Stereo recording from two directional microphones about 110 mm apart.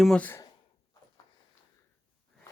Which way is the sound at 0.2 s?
15° left (ahead or behind).